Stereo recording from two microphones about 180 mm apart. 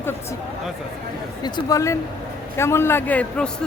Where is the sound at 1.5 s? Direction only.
15° left (ahead or behind).